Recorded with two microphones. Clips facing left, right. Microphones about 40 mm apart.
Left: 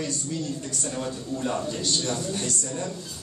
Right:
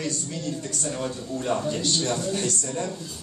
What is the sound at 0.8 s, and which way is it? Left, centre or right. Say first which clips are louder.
A man's voice: right 1 dB; centre.